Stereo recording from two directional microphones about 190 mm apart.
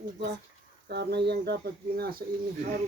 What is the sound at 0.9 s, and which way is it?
Speech, 65° right (ahead or behind).